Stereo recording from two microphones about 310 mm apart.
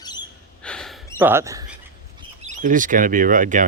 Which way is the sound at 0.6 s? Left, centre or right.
Centre.